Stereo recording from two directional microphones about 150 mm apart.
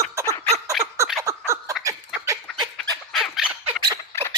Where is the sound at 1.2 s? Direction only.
20° right (ahead or behind).